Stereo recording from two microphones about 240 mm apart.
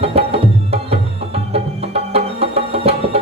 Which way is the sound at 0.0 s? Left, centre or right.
Right.